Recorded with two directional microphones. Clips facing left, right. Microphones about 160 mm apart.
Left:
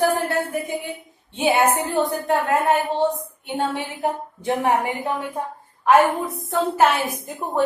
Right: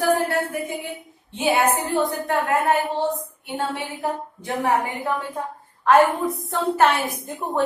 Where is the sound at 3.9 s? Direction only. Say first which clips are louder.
Left 2 dB; 20° left (ahead or behind).